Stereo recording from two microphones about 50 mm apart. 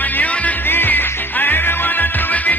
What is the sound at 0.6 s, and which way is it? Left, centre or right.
Music, left.